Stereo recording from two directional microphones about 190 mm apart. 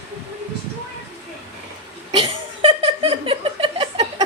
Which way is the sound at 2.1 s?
30° right (ahead or behind).